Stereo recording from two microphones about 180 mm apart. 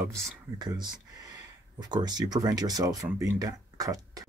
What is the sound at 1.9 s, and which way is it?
Speech, 20° right (ahead or behind).